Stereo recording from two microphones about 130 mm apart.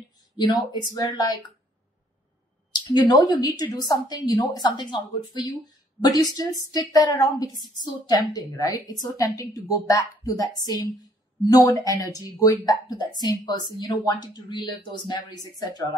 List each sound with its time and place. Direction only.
0.4 s speech: 35° left (ahead or behind)
3.1 s a woman's voice: 30° left (ahead or behind)